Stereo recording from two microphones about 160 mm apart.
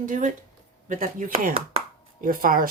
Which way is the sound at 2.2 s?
65° right (ahead or behind).